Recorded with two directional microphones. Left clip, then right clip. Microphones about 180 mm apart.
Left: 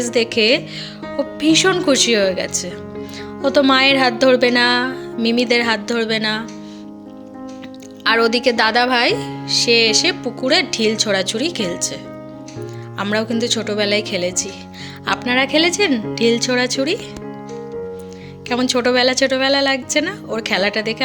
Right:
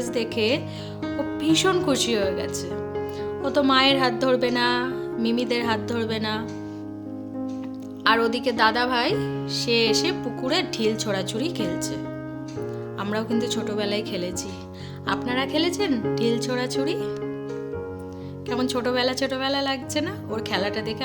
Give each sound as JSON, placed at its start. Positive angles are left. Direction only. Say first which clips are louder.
{"t": 0.0, "sound": "speech", "louder": "left 9 dB", "side_deg": 10}
{"t": 8.0, "sound": "speech", "louder": "left 6 dB", "side_deg": 10}
{"t": 13.0, "sound": "speech", "louder": "left 8 dB", "side_deg": 10}
{"t": 18.4, "sound": "speech", "louder": "left 8 dB", "side_deg": 10}